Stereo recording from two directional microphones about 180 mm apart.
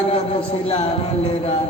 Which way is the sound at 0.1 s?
30° left (ahead or behind).